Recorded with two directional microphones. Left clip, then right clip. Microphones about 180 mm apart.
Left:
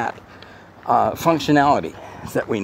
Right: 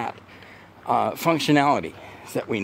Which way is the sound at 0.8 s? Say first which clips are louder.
Left 4 dB; 10° right (ahead or behind).